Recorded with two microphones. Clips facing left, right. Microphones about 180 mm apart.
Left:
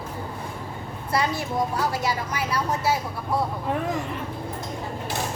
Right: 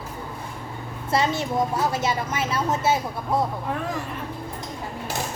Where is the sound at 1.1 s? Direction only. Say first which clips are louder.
Right 2 dB; 25° right (ahead or behind).